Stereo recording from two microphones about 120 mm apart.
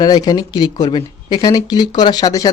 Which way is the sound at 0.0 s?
35° left (ahead or behind).